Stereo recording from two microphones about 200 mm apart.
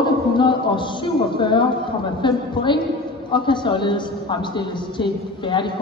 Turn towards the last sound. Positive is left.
turn(degrees=25)  # may be behind; listen again after turning